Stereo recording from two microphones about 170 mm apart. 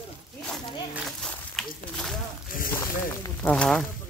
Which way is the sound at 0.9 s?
Centre (ahead or behind).